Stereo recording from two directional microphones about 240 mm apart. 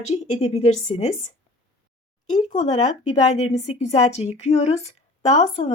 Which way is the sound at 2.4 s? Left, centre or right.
Left.